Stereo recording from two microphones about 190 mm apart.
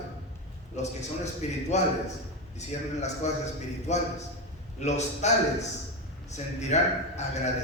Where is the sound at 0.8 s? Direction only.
35° left (ahead or behind).